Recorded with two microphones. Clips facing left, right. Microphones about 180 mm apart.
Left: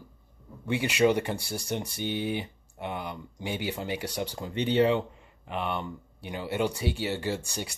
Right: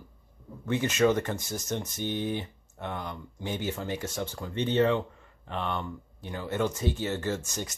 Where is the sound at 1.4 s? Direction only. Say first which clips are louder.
Even; 30° left (ahead or behind).